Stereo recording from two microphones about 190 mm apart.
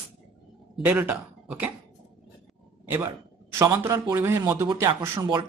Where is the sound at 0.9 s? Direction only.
10° right (ahead or behind).